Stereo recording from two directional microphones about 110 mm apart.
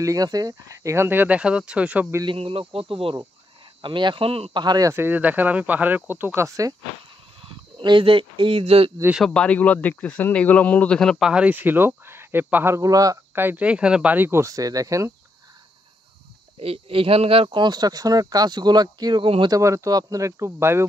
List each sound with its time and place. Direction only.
0.0 s speech: 30° right (ahead or behind); by 2.1 s 15° right (ahead or behind)
2.2 s speech: 60° right (ahead or behind)
4.6 s speech: 35° right (ahead or behind)
4.9 s speech: 15° right (ahead or behind)
7.4 s speech: 50° right (ahead or behind)
9.3 s a man's voice: 10° left (ahead or behind)
11.2 s speech: 10° right (ahead or behind)
12.7 s speech: 30° right (ahead or behind)
13.3 s speech: 20° right (ahead or behind)
16.5 s speech: 60° right (ahead or behind)
19.5 s speech: 30° right (ahead or behind)